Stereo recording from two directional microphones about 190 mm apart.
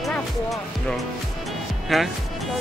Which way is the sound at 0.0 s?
Centre (ahead or behind).